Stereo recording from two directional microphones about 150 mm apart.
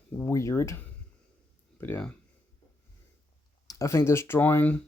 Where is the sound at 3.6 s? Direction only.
25° left (ahead or behind).